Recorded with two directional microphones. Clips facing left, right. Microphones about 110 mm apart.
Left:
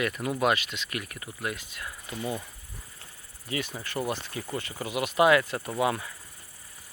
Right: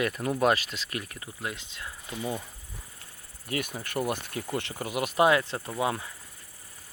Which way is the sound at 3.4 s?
50° right (ahead or behind).